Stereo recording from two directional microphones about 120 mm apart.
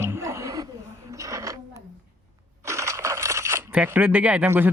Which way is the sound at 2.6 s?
25° right (ahead or behind).